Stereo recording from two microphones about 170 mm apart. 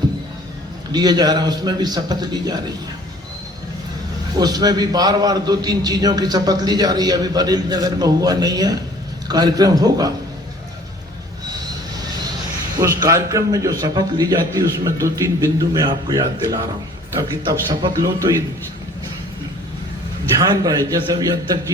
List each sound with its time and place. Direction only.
0.9 s a man's voice: 25° right (ahead or behind)
4.4 s a man's voice: 25° right (ahead or behind)
12.8 s a man's voice: 15° right (ahead or behind)
20.4 s a man's voice: 20° right (ahead or behind)